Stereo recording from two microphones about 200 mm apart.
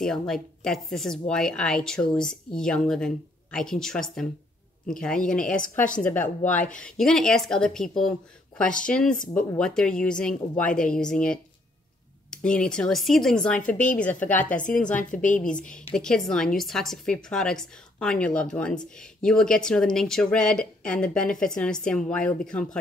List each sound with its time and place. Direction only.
0.0 s a woman's voice: centre (ahead or behind)
14.5 s a woman's voice: 40° left (ahead or behind)
14.8 s a woman's voice: 5° left (ahead or behind)
15.0 s a woman's voice: 40° left (ahead or behind)
15.4 s a woman's voice: 5° left (ahead or behind)